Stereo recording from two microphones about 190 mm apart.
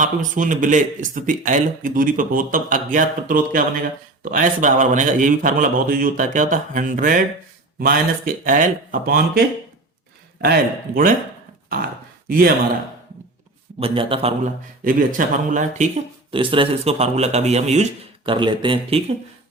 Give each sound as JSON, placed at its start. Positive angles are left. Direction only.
{"t": 0.0, "sound": "speech", "side_deg": -45}
{"t": 10.4, "sound": "speech", "side_deg": -50}
{"t": 13.7, "sound": "speech", "side_deg": -30}
{"t": 14.8, "sound": "speech", "side_deg": -45}
{"t": 16.3, "sound": "speech", "side_deg": -25}
{"t": 18.3, "sound": "speech", "side_deg": -25}